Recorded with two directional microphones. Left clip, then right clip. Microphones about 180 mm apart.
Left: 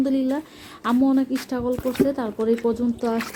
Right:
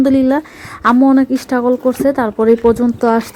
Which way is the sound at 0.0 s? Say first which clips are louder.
Right 11 dB; 45° right (ahead or behind).